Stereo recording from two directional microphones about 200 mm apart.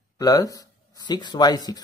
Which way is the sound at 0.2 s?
20° left (ahead or behind).